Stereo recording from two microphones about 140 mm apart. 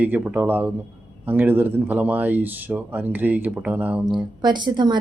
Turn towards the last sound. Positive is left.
turn(degrees=-30)  # may be behind; listen again after turning